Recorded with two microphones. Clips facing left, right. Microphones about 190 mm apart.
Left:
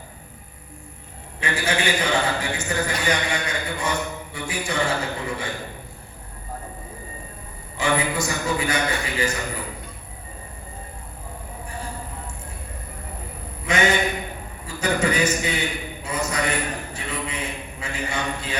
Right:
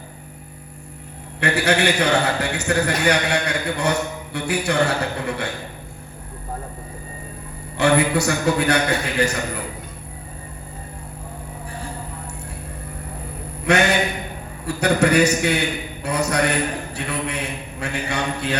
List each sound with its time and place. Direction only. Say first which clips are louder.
1.4 s a man's voice: right 6 dB; 70° right (ahead or behind)
7.8 s a man's voice: right 6 dB; 70° right (ahead or behind)
13.7 s a man's voice: right 3 dB; 70° right (ahead or behind)